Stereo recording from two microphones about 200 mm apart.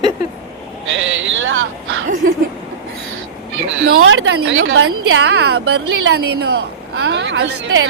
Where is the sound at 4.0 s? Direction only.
75° right (ahead or behind).